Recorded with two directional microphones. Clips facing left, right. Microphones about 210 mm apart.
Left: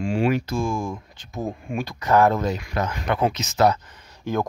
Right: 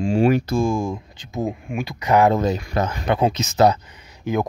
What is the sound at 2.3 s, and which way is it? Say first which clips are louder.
Speech: right 4 dB; 25° right (ahead or behind).